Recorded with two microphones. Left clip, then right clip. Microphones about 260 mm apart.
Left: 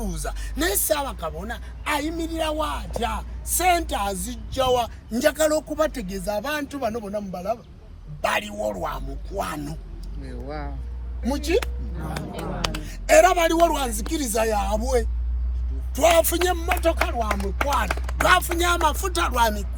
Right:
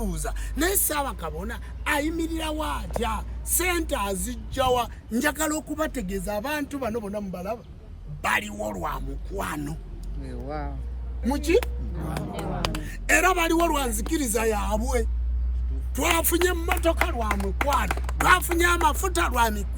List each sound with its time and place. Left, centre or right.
0.0 s music: centre
11.3 s music: centre
12.2 s speech: right
12.8 s music: centre
14.1 s speech: centre
16.0 s music: centre